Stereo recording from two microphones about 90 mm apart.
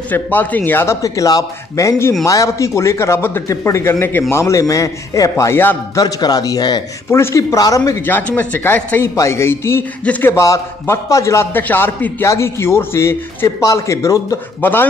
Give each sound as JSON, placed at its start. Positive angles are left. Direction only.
{"t": 0.1, "sound": "a man's voice", "side_deg": 20}
{"t": 1.0, "sound": "a man's voice", "side_deg": 40}
{"t": 5.4, "sound": "a man's voice", "side_deg": 25}
{"t": 5.9, "sound": "a man's voice", "side_deg": 45}
{"t": 7.1, "sound": "a man's voice", "side_deg": 30}
{"t": 7.5, "sound": "a man's voice", "side_deg": 40}
{"t": 8.0, "sound": "a man's voice", "side_deg": 20}
{"t": 10.4, "sound": "a man's voice", "side_deg": 35}
{"t": 11.6, "sound": "a man's voice", "side_deg": 20}
{"t": 14.6, "sound": "a man's voice", "side_deg": 25}